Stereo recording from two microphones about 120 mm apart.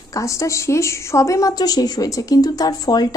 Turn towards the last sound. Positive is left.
turn(degrees=30)  # may be behind; listen again after turning